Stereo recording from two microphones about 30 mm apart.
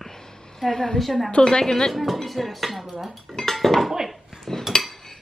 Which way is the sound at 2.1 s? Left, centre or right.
Centre.